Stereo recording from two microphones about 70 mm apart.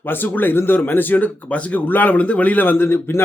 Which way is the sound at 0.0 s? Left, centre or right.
Left.